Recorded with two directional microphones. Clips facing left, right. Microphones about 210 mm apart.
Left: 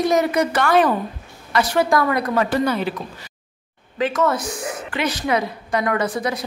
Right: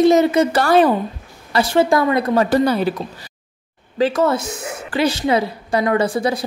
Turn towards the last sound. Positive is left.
turn(degrees=-30)  # may be behind; listen again after turning